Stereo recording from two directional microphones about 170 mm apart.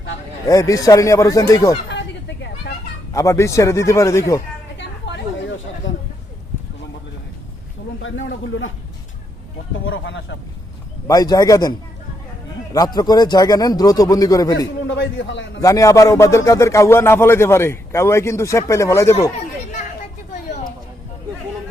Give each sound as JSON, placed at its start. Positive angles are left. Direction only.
{"t": 0.4, "sound": "speech", "side_deg": 20}
{"t": 1.9, "sound": "vehicle", "side_deg": 90}
{"t": 3.1, "sound": "speech", "side_deg": 20}
{"t": 4.8, "sound": "a sound", "side_deg": 90}
{"t": 8.1, "sound": "a man's voice", "side_deg": 90}
{"t": 9.9, "sound": "a man's voice", "side_deg": 90}
{"t": 11.0, "sound": "speech", "side_deg": 20}
{"t": 12.7, "sound": "speech", "side_deg": 25}
{"t": 14.8, "sound": "a man's voice", "side_deg": 90}
{"t": 15.6, "sound": "speech", "side_deg": 20}